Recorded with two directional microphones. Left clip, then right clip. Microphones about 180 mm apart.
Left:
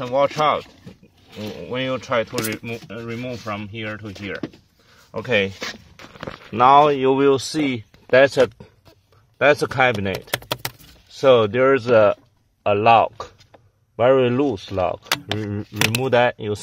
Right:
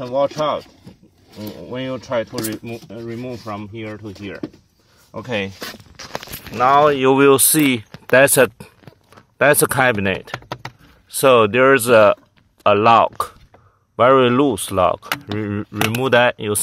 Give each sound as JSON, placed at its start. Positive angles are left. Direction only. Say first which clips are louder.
{"t": 0.0, "sound": "speech", "louder": "left 1 dB", "side_deg": 20}
{"t": 6.6, "sound": "speech", "louder": "left 1 dB", "side_deg": 20}
{"t": 6.9, "sound": "speech", "louder": "right 4 dB", "side_deg": -5}
{"t": 7.2, "sound": "speech", "louder": "right 5 dB", "side_deg": -20}